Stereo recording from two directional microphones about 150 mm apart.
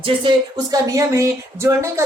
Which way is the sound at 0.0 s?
35° right (ahead or behind).